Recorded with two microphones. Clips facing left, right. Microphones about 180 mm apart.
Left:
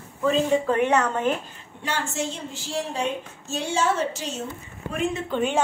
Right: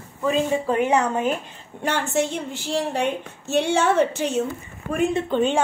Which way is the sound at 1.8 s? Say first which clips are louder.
Right 6 dB; 60° right (ahead or behind).